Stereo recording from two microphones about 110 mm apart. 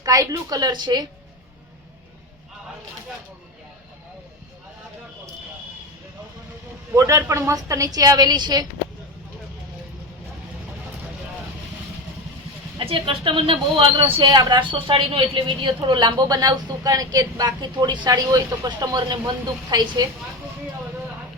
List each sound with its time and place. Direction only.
0.0 s speech: 30° right (ahead or behind)
6.9 s speech: 30° right (ahead or behind)
12.8 s speech: 55° right (ahead or behind); by 20.1 s 40° right (ahead or behind)